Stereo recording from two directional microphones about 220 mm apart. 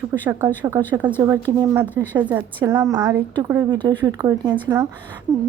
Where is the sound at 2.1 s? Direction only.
5° right (ahead or behind).